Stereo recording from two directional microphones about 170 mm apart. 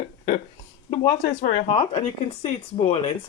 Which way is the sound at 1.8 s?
35° left (ahead or behind).